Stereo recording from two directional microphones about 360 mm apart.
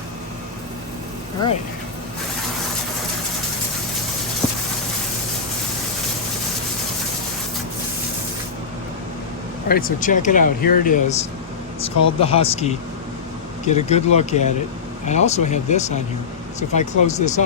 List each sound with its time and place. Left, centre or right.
9.6 s speech: left